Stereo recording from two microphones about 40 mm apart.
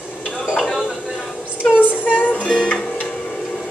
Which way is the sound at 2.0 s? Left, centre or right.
Left.